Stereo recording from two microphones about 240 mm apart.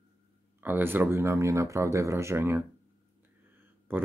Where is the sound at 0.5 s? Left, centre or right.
Centre.